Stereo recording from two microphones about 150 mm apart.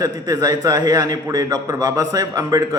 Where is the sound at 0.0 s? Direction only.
25° right (ahead or behind).